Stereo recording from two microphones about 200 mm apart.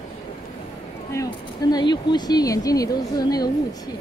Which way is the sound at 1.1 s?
20° left (ahead or behind).